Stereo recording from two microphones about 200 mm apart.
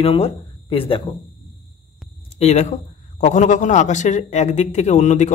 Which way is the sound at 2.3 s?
35° left (ahead or behind).